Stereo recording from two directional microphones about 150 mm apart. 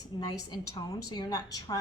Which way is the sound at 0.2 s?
25° left (ahead or behind).